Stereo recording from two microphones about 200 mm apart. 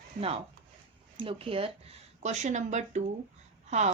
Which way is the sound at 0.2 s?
30° right (ahead or behind).